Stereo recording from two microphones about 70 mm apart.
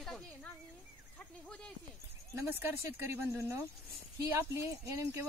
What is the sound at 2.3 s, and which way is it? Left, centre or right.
Speech, right.